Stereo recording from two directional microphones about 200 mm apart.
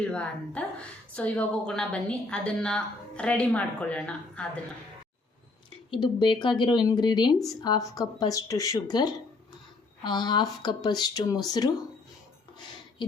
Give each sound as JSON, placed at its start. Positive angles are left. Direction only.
{"t": 0.0, "sound": "a woman's voice", "side_deg": 5}
{"t": 5.9, "sound": "speech", "side_deg": 20}